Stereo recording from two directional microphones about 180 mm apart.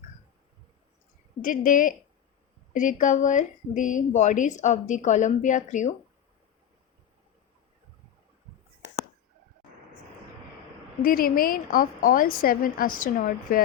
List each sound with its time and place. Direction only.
1.4 s a woman's voice: 45° left (ahead or behind)
11.0 s a woman's voice: 55° left (ahead or behind)